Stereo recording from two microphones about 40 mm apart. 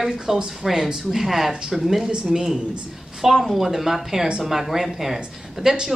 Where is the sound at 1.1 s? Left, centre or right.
Centre.